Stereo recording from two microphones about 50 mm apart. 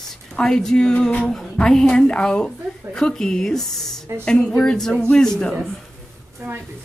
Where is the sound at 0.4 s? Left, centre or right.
Centre.